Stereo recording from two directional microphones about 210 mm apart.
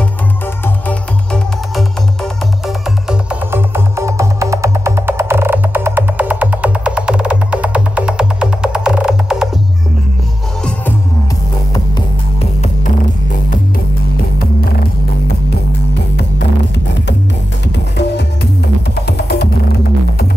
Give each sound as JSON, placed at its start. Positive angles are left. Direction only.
{"t": 0.8, "sound": "music", "side_deg": 5}
{"t": 3.1, "sound": "music", "side_deg": -10}
{"t": 19.0, "sound": "music", "side_deg": 50}